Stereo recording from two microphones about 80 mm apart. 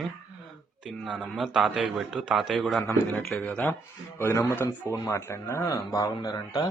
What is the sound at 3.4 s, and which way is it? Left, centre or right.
Speech, centre.